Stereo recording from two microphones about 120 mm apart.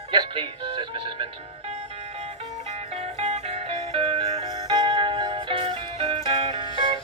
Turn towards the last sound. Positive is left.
turn(degrees=-40)  # may be behind; listen again after turning